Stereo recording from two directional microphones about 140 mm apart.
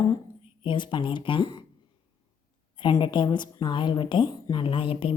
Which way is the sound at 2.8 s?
35° left (ahead or behind).